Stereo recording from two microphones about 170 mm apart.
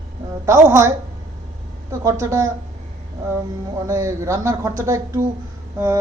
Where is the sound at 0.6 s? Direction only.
15° right (ahead or behind).